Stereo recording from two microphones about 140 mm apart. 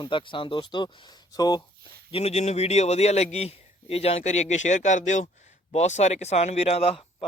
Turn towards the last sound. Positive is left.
turn(degrees=45)  # may be behind; listen again after turning